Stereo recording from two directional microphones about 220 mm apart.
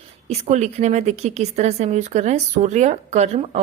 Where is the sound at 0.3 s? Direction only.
30° right (ahead or behind).